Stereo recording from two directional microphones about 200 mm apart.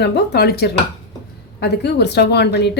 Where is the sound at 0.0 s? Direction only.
55° left (ahead or behind).